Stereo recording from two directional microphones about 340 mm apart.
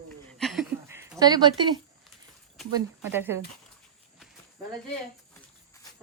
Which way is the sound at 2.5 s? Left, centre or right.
Centre.